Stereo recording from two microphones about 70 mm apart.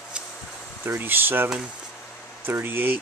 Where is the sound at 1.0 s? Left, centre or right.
Right.